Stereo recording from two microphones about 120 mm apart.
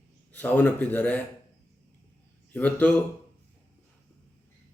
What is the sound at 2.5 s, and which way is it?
Speech, 10° left (ahead or behind).